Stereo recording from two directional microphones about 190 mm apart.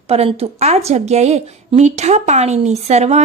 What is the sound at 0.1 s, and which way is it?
A woman's voice, 30° right (ahead or behind).